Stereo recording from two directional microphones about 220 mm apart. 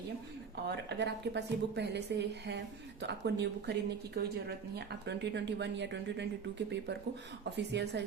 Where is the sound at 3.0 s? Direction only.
50° right (ahead or behind).